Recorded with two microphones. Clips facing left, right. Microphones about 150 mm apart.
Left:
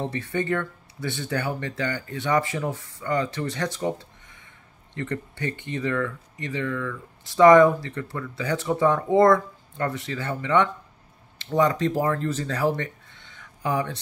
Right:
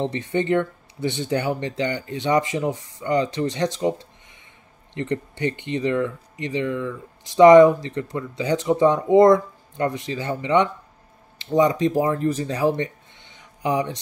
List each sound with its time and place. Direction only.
0.0 s speech: 20° right (ahead or behind)